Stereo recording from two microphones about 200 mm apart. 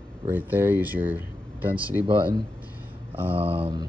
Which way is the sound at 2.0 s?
25° right (ahead or behind).